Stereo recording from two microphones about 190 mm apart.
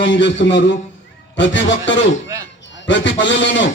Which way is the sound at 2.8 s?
75° left (ahead or behind).